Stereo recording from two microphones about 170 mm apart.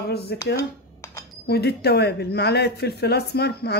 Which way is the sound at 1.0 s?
15° left (ahead or behind).